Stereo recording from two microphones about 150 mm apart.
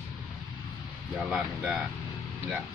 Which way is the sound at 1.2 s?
5° right (ahead or behind).